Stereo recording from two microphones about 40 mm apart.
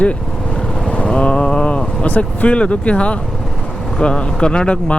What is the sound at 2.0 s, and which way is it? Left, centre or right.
Speech, left.